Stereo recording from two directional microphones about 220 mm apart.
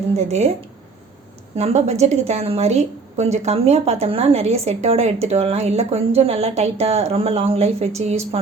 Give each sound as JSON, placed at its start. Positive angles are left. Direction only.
{"t": 0.2, "sound": "a woman's voice", "side_deg": -30}
{"t": 1.5, "sound": "a woman's voice", "side_deg": -30}